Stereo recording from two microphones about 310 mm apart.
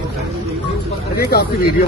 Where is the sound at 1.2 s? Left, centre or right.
Left.